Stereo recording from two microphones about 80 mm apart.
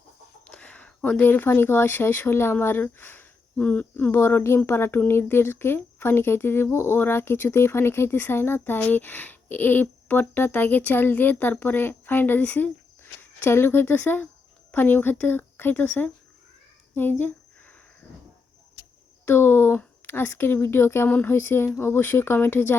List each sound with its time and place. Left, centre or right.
0.4 s speech: centre
13.0 s speech: left
16.9 s a sound: left
19.2 s speech: left